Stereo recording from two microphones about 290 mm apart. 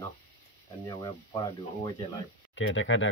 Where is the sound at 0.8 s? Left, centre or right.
Centre.